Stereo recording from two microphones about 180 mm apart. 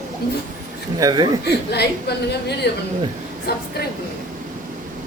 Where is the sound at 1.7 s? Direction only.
65° left (ahead or behind).